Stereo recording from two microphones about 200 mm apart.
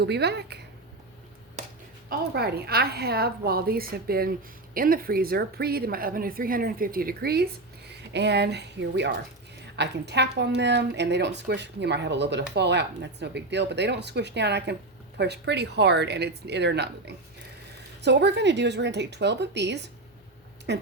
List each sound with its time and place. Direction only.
0.0 s a woman's voice: 55° right (ahead or behind)
2.0 s a woman's voice: 50° right (ahead or behind)